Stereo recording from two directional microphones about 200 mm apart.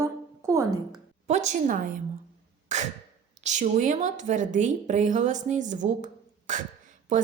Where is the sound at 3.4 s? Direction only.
35° right (ahead or behind).